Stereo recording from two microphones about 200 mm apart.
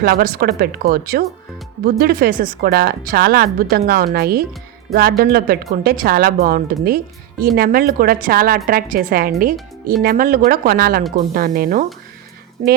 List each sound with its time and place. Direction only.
0.0 s a woman's voice: 45° right (ahead or behind)